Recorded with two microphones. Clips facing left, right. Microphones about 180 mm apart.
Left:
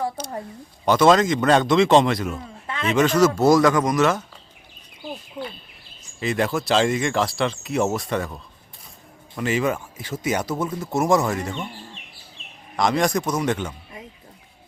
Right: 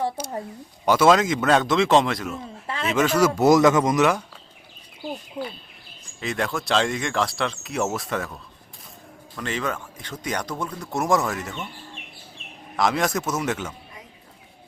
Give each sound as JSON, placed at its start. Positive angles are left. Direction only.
{"t": 0.2, "sound": "a man's voice", "side_deg": -10}
{"t": 6.1, "sound": "speech", "side_deg": 0}
{"t": 9.4, "sound": "speech", "side_deg": 10}
{"t": 12.7, "sound": "speech", "side_deg": -5}